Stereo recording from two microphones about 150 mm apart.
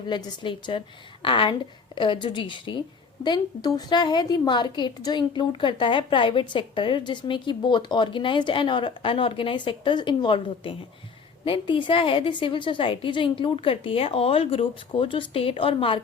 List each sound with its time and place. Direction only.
0.1 s a woman's voice: 30° left (ahead or behind)